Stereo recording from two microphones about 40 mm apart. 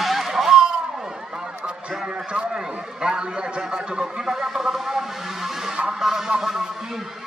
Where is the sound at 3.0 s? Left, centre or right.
Centre.